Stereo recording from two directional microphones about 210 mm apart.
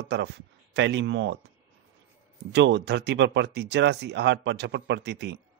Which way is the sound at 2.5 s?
55° right (ahead or behind).